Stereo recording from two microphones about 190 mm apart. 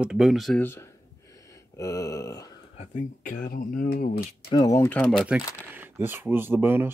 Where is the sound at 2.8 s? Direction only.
40° left (ahead or behind).